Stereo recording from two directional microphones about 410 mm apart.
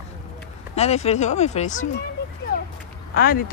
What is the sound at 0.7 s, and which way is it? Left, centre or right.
Speech, centre.